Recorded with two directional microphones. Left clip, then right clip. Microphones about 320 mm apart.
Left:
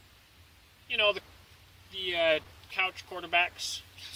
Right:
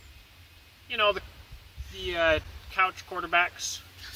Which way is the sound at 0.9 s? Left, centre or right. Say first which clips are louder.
Right 2 dB; centre.